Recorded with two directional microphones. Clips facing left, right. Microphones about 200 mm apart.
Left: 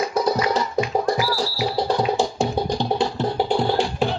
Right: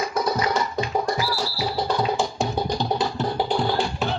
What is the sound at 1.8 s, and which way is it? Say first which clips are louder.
Music: left 2 dB; 30° left (ahead or behind).